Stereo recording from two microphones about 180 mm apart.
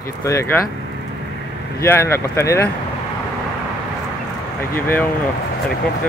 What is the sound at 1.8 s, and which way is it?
Speech, 15° left (ahead or behind).